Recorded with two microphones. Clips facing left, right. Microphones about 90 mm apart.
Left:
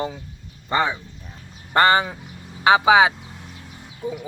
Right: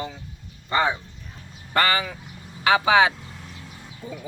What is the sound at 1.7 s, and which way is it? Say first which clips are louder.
Speech: left 5 dB; 30° left (ahead or behind).